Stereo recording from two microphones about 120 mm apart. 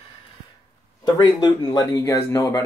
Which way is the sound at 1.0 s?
35° left (ahead or behind).